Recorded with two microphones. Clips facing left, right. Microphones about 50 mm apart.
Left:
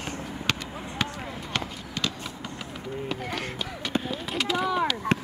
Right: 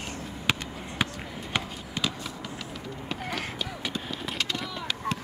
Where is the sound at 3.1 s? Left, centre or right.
Centre.